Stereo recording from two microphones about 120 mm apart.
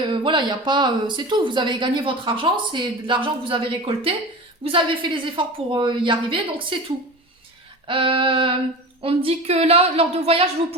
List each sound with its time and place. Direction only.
0.0 s a woman's voice: 45° right (ahead or behind)